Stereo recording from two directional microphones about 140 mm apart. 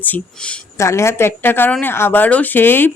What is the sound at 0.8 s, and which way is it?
Speech, 20° left (ahead or behind).